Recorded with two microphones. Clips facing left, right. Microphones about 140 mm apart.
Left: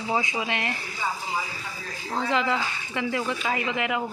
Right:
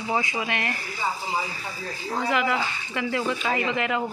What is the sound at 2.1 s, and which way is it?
Speech, 5° right (ahead or behind).